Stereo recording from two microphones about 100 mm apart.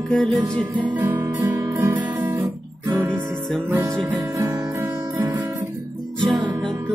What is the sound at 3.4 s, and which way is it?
Music, 5° left (ahead or behind).